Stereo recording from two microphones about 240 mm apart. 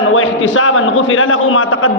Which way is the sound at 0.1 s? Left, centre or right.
Left.